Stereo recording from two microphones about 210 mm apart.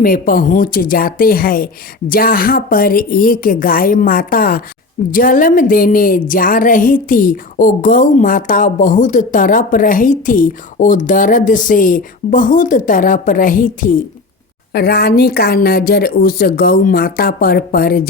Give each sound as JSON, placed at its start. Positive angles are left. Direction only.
{"t": 0.0, "sound": "speech", "side_deg": 45}